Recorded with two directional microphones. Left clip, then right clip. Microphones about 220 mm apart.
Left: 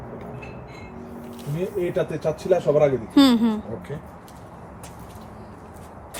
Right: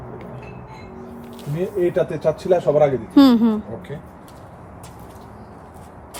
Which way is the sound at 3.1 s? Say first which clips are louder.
Right 4 dB; 15° right (ahead or behind).